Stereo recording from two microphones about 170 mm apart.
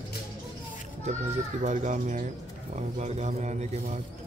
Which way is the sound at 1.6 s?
45° right (ahead or behind).